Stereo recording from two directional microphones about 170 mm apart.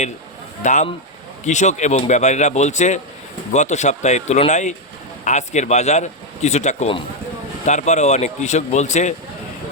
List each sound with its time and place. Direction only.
0.6 s speech: 45° left (ahead or behind)